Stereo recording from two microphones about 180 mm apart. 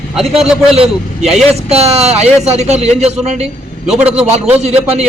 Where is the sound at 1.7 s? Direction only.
35° right (ahead or behind).